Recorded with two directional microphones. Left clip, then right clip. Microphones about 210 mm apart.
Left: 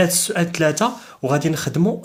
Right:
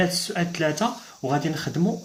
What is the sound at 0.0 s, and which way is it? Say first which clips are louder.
Speech: left 6 dB; 45° left (ahead or behind).